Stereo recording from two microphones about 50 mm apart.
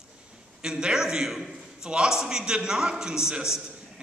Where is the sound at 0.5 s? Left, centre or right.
Centre.